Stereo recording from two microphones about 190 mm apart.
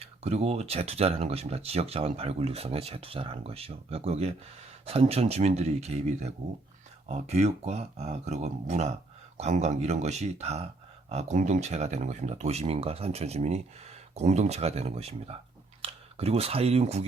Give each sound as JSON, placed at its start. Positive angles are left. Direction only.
{"t": 0.0, "sound": "speech", "side_deg": -35}